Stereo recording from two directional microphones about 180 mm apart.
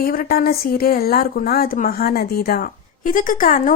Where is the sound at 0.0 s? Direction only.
55° left (ahead or behind).